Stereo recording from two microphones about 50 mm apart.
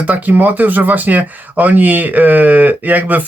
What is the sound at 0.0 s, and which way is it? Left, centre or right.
Speech, right.